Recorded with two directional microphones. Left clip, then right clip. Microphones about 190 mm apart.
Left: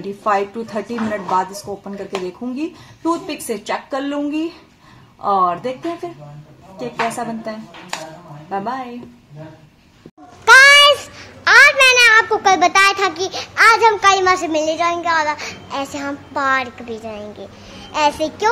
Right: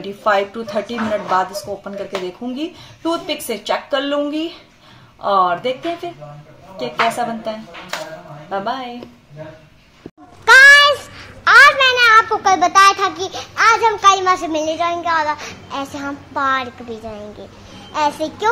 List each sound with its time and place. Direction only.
0.0 s a woman's voice: centre (ahead or behind)
5.6 s a woman's voice: centre (ahead or behind)
7.1 s speech: centre (ahead or behind)
10.4 s a sound: 5° left (ahead or behind)
13.6 s a woman's voice: 15° left (ahead or behind)